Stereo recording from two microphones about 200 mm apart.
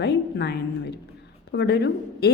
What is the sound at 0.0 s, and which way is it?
A woman's voice, 55° left (ahead or behind).